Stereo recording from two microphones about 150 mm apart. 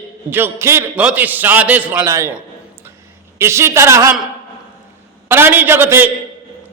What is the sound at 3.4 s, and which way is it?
Speech, 15° right (ahead or behind).